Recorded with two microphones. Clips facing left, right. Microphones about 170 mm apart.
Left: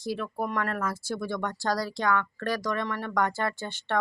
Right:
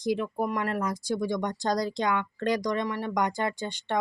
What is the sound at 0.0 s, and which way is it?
Speech, 15° right (ahead or behind).